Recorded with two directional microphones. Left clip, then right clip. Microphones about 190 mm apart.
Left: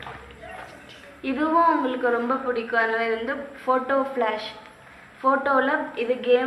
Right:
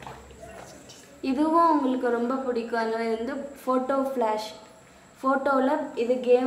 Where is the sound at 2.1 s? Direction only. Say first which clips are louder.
Left 3 dB; 90° right.